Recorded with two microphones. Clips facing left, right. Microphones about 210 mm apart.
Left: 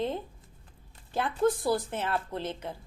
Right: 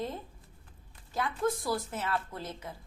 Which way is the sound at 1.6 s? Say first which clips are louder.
Left 5 dB; 30° left (ahead or behind).